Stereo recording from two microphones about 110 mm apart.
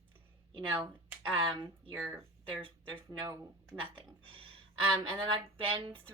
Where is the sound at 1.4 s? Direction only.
45° right (ahead or behind).